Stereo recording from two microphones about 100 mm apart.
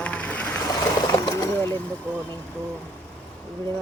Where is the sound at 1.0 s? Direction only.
45° left (ahead or behind).